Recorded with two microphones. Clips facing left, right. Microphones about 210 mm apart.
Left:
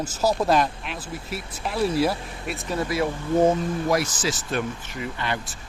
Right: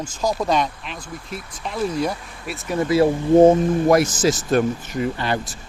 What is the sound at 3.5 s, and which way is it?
Speech, 50° right (ahead or behind).